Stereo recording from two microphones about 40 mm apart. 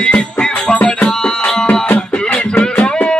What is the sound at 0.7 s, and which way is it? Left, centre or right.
Music, left.